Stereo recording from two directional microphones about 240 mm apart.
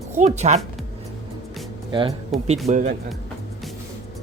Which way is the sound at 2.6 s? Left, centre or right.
Right.